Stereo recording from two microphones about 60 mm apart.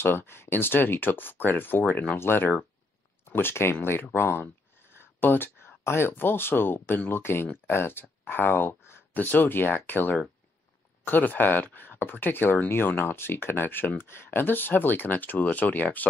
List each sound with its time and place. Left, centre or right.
0.0 s speech: left